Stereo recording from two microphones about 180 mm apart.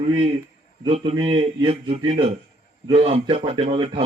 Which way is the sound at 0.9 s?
30° right (ahead or behind).